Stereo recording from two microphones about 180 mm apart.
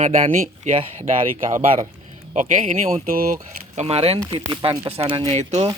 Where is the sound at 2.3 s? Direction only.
45° right (ahead or behind).